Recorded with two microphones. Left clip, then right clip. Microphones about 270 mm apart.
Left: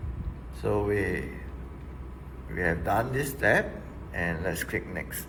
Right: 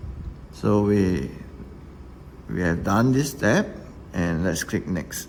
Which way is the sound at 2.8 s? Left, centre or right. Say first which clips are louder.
Right 5 dB; right.